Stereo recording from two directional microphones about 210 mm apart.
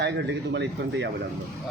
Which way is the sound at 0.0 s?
55° right (ahead or behind).